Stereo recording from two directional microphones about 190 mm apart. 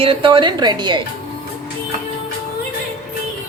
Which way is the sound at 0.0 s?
30° right (ahead or behind).